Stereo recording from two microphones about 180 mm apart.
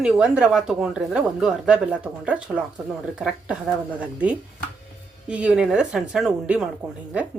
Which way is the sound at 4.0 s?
5° right (ahead or behind).